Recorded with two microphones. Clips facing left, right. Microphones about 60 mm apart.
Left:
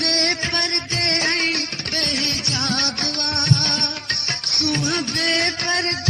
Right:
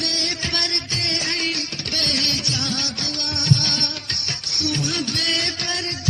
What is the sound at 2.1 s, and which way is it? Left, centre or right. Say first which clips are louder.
Music: right 2 dB; left.